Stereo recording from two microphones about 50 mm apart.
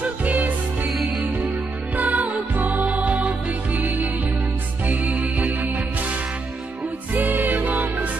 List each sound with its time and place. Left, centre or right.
0.0 s music: right
0.8 s music: centre
2.0 s music: right
7.2 s music: right